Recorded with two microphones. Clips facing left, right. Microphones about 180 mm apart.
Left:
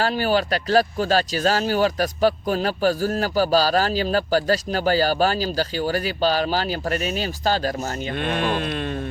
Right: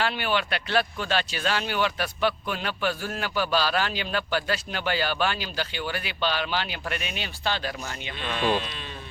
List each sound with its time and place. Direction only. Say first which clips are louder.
0.0 s speech: left 6 dB; 40° left (ahead or behind)
8.1 s speech: left 2 dB; 55° left (ahead or behind)